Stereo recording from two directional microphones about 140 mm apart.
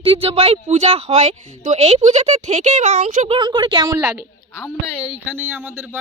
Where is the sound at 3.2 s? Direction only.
35° right (ahead or behind).